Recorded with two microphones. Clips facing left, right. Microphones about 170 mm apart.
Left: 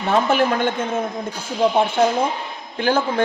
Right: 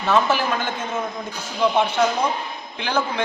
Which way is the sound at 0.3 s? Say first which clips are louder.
Left 5 dB; 55° left (ahead or behind).